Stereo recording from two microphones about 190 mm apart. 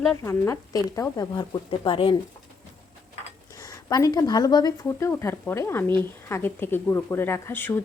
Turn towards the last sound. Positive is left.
turn(degrees=10)  # may be behind; listen again after turning